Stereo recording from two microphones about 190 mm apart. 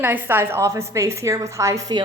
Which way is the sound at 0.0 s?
10° right (ahead or behind).